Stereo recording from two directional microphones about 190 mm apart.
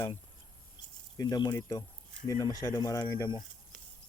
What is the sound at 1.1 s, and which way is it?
Speech, 20° left (ahead or behind).